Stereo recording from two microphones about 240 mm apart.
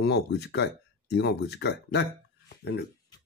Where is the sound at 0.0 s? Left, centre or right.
Left.